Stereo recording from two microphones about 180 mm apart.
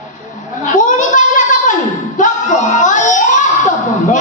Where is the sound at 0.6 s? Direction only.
45° left (ahead or behind).